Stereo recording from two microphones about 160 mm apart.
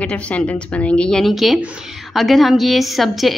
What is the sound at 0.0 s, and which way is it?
A woman's voice, 10° left (ahead or behind).